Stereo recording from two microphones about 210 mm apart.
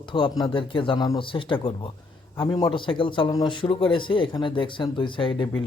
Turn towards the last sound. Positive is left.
turn(degrees=25)  # may be behind; listen again after turning